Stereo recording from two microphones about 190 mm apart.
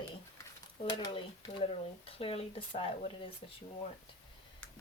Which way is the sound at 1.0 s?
25° left (ahead or behind).